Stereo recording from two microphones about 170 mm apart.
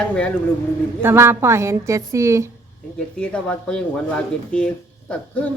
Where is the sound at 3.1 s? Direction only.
5° left (ahead or behind).